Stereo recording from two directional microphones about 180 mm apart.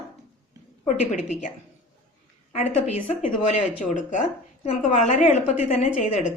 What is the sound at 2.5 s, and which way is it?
A woman's voice, 40° left (ahead or behind).